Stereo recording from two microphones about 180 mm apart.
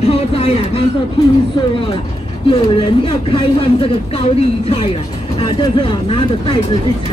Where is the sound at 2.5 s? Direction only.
30° left (ahead or behind).